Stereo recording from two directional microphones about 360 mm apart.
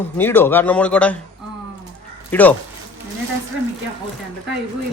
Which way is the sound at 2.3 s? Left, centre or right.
Centre.